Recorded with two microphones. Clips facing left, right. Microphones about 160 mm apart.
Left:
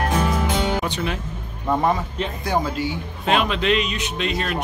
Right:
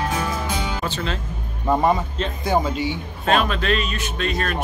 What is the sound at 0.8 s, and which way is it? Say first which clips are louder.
Speech: left 1 dB; 15° left (ahead or behind).